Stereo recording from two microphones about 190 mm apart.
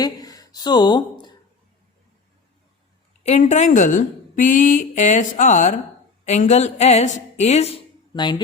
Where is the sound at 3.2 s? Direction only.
35° left (ahead or behind).